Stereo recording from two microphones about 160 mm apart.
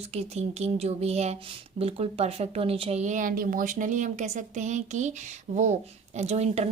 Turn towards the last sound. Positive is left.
turn(degrees=-40)  # may be behind; listen again after turning